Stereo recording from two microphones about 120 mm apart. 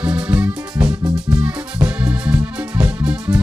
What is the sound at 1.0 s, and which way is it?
Music, 35° right (ahead or behind).